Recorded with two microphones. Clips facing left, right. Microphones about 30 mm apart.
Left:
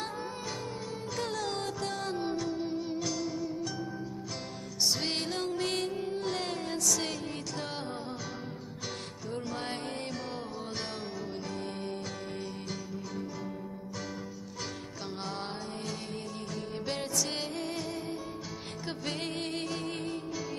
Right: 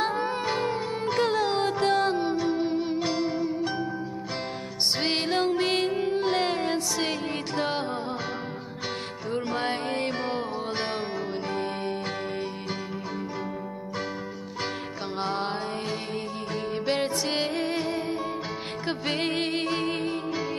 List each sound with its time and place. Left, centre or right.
0.0 s music: right
2.1 s music: right
4.8 s music: right
9.3 s music: right
15.2 s music: right
16.7 s music: right